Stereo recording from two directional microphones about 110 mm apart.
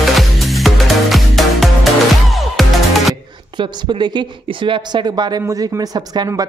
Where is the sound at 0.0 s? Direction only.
Centre (ahead or behind).